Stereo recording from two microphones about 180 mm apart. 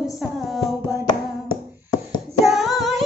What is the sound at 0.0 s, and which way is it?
Music, centre (ahead or behind).